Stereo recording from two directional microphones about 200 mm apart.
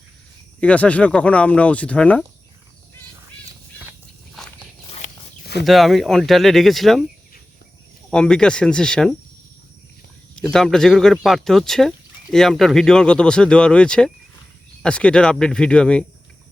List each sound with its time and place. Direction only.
0.6 s speech: 5° left (ahead or behind)
4.9 s a sound: 35° left (ahead or behind)
5.6 s speech: centre (ahead or behind)
8.1 s speech: 5° left (ahead or behind)
10.5 s speech: centre (ahead or behind)